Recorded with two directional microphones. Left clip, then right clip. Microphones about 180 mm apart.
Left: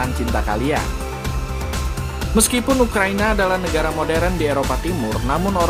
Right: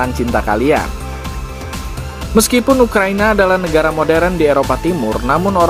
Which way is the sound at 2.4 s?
35° right (ahead or behind).